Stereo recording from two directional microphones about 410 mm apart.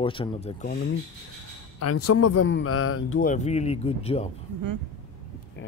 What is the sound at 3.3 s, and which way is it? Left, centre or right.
Speech, centre.